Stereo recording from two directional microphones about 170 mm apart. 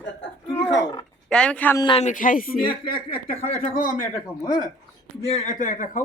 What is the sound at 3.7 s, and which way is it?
Speech, 50° left (ahead or behind).